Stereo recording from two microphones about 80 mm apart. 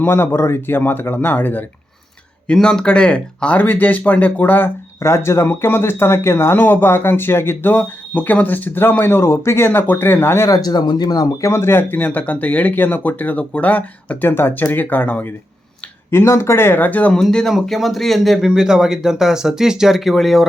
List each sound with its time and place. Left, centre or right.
0.0 s speech: left
2.5 s speech: centre; by 4.7 s left
4.9 s speech: left
10.5 s speech: left
11.4 s speech: left
16.0 s speech: left; by 20.5 s centre